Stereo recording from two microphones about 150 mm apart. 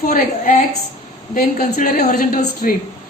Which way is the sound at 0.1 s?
60° left (ahead or behind).